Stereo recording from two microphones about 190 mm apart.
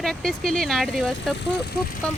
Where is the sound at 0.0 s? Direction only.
Centre (ahead or behind).